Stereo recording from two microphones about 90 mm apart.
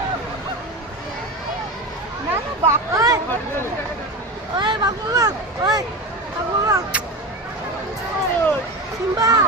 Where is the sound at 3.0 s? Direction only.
40° right (ahead or behind).